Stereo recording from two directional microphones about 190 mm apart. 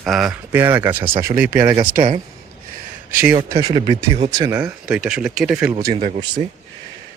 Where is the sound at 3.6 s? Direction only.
20° right (ahead or behind).